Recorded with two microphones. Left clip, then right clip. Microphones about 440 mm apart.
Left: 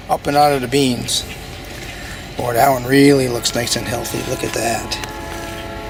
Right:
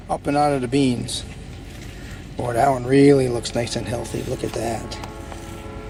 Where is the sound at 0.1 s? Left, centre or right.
Centre.